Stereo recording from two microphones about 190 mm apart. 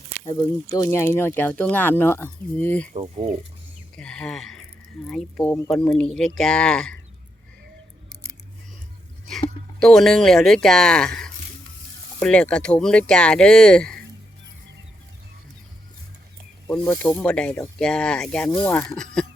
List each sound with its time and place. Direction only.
0.3 s speech: 20° left (ahead or behind)
2.9 s speech: 35° right (ahead or behind)
3.9 s speech: 5° left (ahead or behind)
9.8 s speech: centre (ahead or behind)
16.6 s speech: 5° left (ahead or behind)